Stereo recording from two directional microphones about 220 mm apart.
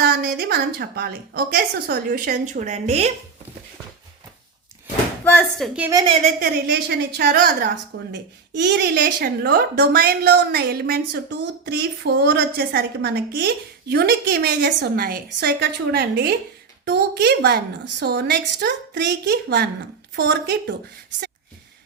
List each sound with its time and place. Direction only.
0.0 s a woman's voice: 45° right (ahead or behind)
5.2 s speech: 10° left (ahead or behind)
5.9 s a woman's voice: 15° right (ahead or behind)
6.7 s a woman's voice: 50° right (ahead or behind)